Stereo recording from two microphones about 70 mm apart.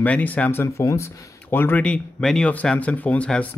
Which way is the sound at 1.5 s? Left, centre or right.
Left.